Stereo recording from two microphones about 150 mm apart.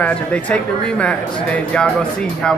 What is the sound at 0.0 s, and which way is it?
A man's voice, 10° left (ahead or behind).